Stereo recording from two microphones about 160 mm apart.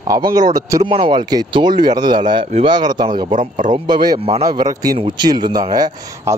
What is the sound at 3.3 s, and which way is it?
Speech, 55° right (ahead or behind).